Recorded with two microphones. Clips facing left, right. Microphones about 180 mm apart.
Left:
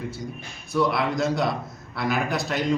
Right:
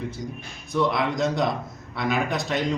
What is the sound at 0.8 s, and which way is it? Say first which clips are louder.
A man's voice: even; 5° left (ahead or behind).